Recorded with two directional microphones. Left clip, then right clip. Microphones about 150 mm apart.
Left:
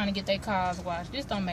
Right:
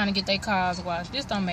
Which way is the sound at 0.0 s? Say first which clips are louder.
Right 4 dB; 20° right (ahead or behind).